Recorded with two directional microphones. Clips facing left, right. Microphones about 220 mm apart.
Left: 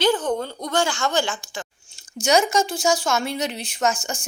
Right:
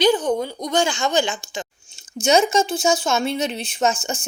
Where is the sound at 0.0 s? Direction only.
15° right (ahead or behind).